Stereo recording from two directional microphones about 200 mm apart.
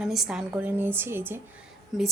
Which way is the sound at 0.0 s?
Centre (ahead or behind).